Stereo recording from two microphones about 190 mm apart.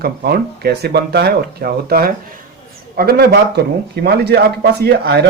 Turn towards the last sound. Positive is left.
turn(degrees=-60)  # may be behind; listen again after turning